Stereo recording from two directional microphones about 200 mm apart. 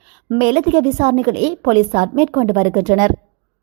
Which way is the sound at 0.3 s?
35° right (ahead or behind).